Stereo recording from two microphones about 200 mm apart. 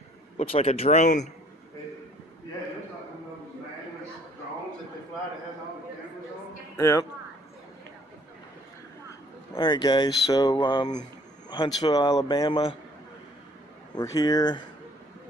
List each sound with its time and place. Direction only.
0.4 s speech: 30° left (ahead or behind)
6.8 s speech: 15° left (ahead or behind)
9.5 s speech: 20° left (ahead or behind)
13.9 s speech: 15° left (ahead or behind)